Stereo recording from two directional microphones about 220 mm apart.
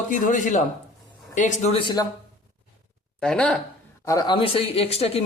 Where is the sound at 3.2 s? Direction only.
5° left (ahead or behind).